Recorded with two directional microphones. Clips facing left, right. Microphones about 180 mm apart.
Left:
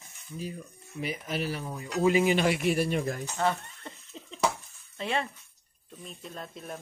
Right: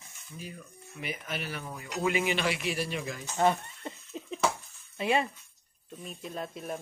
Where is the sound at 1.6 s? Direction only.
25° left (ahead or behind).